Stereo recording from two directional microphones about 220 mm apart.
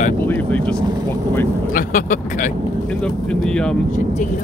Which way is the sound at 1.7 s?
35° left (ahead or behind).